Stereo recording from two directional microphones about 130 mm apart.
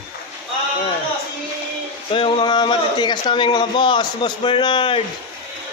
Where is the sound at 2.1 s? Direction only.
40° left (ahead or behind).